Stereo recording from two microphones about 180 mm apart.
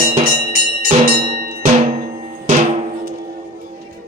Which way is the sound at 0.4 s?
55° right (ahead or behind).